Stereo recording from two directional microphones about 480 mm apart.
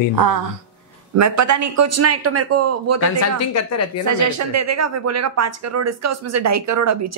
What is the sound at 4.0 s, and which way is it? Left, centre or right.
Speech, right.